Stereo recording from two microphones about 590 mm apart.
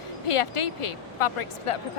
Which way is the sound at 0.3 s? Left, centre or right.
Left.